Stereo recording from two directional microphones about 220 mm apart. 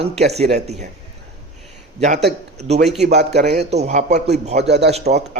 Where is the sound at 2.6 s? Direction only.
30° right (ahead or behind).